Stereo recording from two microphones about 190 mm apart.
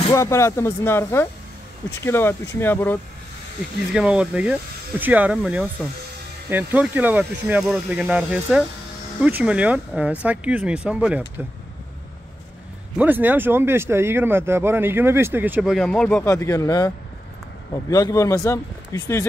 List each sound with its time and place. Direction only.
0.1 s speech: 15° left (ahead or behind)
3.9 s speech: 5° right (ahead or behind)
12.9 s speech: 10° right (ahead or behind)
16.3 s speech: 15° left (ahead or behind)